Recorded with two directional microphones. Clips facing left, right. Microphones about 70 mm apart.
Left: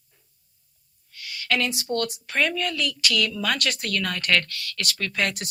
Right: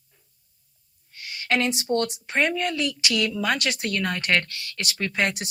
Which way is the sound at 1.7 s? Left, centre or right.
Right.